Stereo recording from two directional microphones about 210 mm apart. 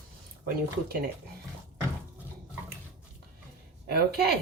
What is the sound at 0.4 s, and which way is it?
Speech, 45° right (ahead or behind).